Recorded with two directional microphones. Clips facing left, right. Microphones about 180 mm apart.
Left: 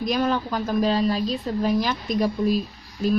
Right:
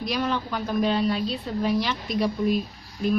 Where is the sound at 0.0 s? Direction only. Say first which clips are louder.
Left 4 dB; 45° left (ahead or behind).